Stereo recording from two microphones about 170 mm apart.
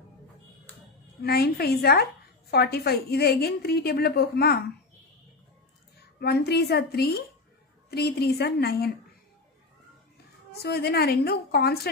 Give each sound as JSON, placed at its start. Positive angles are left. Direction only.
{"t": 1.2, "sound": "a woman's voice", "side_deg": 70}
{"t": 6.1, "sound": "a woman's voice", "side_deg": 70}
{"t": 10.6, "sound": "a woman's voice", "side_deg": 70}